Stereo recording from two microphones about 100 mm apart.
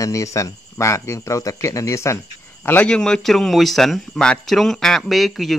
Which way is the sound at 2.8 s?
10° left (ahead or behind).